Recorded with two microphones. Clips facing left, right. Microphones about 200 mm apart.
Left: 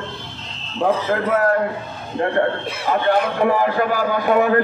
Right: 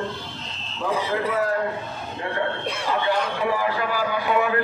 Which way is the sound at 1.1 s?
55° left (ahead or behind).